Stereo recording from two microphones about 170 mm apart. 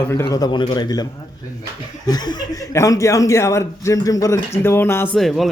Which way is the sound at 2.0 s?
25° left (ahead or behind).